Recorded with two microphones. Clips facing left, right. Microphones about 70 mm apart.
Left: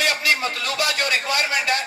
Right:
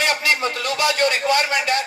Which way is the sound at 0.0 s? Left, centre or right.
Right.